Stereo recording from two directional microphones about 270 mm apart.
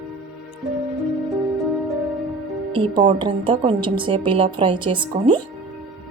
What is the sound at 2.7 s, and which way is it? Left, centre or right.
A woman's voice, right.